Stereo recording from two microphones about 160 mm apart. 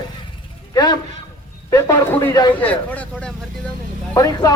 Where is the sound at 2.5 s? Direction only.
10° left (ahead or behind).